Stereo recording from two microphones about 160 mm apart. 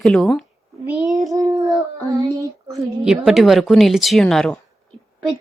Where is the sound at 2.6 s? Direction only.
20° right (ahead or behind).